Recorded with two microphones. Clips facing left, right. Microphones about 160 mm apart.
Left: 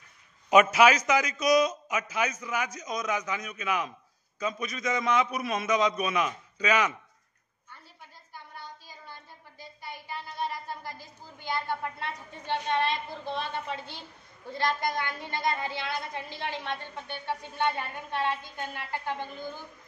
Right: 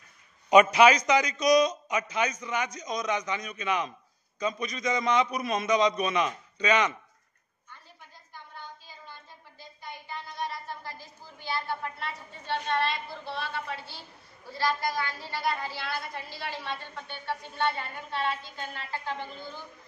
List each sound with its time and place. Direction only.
0.5 s a man's voice: 5° left (ahead or behind)
8.5 s child singing: 10° left (ahead or behind)
9.6 s a sound: 10° left (ahead or behind)
15.0 s a woman's voice: 20° left (ahead or behind)